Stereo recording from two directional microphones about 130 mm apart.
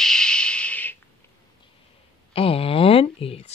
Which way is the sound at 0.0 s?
5° left (ahead or behind).